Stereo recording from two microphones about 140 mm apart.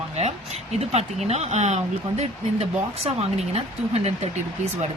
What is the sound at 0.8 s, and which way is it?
Speech, 50° right (ahead or behind).